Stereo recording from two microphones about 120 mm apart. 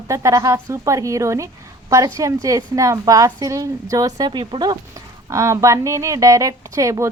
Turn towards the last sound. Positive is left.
turn(degrees=-25)  # may be behind; listen again after turning